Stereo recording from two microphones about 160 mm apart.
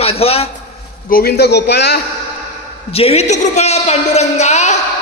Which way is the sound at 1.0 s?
70° left (ahead or behind).